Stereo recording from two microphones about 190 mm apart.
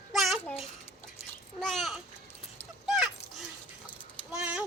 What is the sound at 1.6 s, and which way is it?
Babbling, centre (ahead or behind).